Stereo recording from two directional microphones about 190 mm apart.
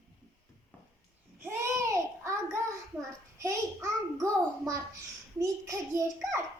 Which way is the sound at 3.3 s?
15° right (ahead or behind).